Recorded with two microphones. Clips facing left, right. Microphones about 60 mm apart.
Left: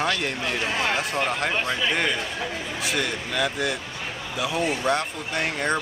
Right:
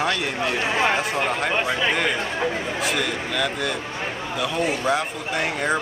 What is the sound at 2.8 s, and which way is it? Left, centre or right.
Speech, centre.